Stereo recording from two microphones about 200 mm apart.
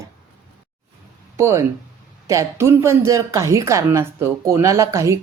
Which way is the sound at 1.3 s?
15° right (ahead or behind).